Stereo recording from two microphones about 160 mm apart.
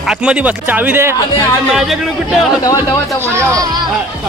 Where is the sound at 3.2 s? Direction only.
20° right (ahead or behind).